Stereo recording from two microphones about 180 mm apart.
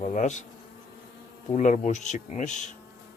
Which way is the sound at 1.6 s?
45° left (ahead or behind).